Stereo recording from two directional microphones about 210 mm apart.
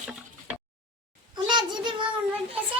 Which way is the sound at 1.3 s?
20° right (ahead or behind).